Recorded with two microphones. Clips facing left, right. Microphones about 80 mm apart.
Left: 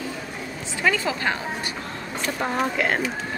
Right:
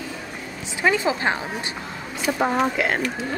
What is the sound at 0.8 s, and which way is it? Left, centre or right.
Speech, right.